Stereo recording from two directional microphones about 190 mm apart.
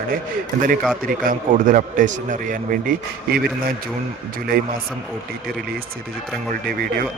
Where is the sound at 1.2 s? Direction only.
45° right (ahead or behind).